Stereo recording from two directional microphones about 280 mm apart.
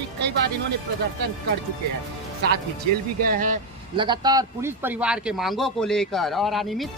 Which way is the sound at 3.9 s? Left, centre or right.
Centre.